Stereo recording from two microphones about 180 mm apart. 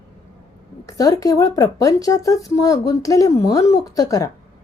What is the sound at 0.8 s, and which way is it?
Speech, 20° left (ahead or behind).